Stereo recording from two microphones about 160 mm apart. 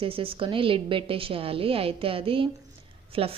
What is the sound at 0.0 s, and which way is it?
A woman's voice, 35° right (ahead or behind).